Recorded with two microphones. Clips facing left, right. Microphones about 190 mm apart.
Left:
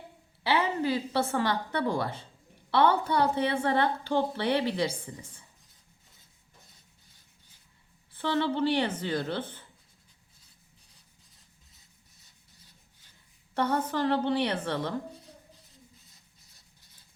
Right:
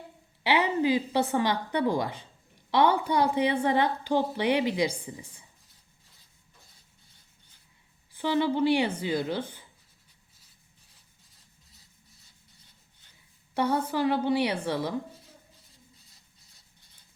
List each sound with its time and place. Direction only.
0.4 s a woman's voice: 15° right (ahead or behind)
8.1 s a woman's voice: 15° right (ahead or behind)
13.5 s a woman's voice: 10° right (ahead or behind)
15.6 s a sound: centre (ahead or behind)